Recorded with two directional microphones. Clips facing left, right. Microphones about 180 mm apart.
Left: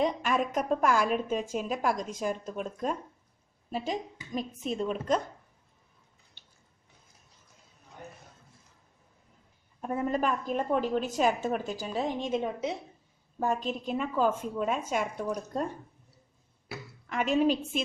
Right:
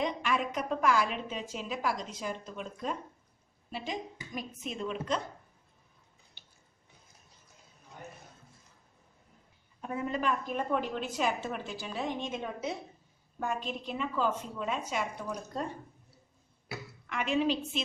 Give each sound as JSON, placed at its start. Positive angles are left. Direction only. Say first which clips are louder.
{"t": 0.0, "sound": "a woman's voice", "louder": "left 4 dB", "side_deg": 45}
{"t": 9.8, "sound": "a woman's voice", "louder": "left 4 dB", "side_deg": 45}
{"t": 12.4, "sound": "a woman's voice", "louder": "left 4 dB", "side_deg": 20}
{"t": 13.4, "sound": "a woman's voice", "louder": "left 5 dB", "side_deg": 40}
{"t": 17.1, "sound": "a woman's voice", "louder": "left 4 dB", "side_deg": 40}